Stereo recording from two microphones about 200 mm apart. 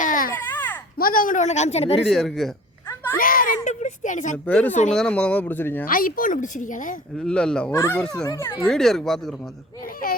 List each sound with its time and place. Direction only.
0.0 s baby cry: 40° left (ahead or behind)
0.3 s baby cry: 10° left (ahead or behind)
0.9 s speech: 45° left (ahead or behind)
2.0 s speech: centre (ahead or behind)
3.2 s a child's voice: 45° left (ahead or behind)
4.4 s speech: 5° left (ahead or behind)
5.8 s speech: 45° left (ahead or behind)
7.2 s speech: 5° left (ahead or behind)
8.2 s speech: 15° left (ahead or behind)
8.7 s speech: centre (ahead or behind)